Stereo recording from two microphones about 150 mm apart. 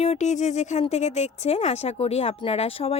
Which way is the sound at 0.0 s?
50° left (ahead or behind).